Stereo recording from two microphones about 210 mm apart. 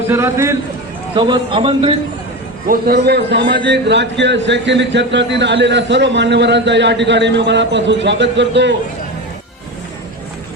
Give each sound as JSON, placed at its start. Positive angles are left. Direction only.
{"t": 0.1, "sound": "a man's voice", "side_deg": -10}
{"t": 1.1, "sound": "a man's voice", "side_deg": -25}
{"t": 2.6, "sound": "a man's voice", "side_deg": -45}